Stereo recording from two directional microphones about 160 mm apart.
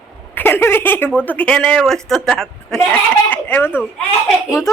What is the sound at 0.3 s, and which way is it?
A woman's voice, 15° left (ahead or behind).